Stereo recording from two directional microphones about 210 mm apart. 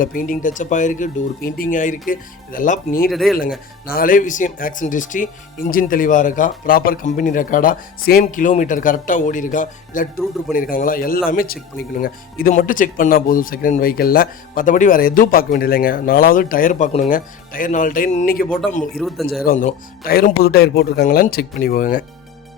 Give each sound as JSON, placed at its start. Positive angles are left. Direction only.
{"t": 0.0, "sound": "speech", "side_deg": 40}
{"t": 3.1, "sound": "speech", "side_deg": 0}
{"t": 3.8, "sound": "speech", "side_deg": 45}
{"t": 18.9, "sound": "speech", "side_deg": 0}
{"t": 19.5, "sound": "speech", "side_deg": 40}